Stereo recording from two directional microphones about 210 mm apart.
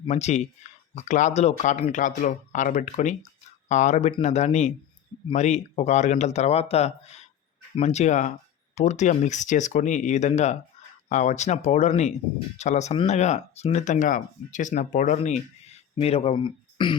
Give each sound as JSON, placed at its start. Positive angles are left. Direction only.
{"t": 0.1, "sound": "speech", "side_deg": 30}